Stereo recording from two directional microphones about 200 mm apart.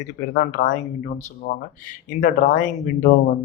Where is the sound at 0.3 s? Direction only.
40° left (ahead or behind).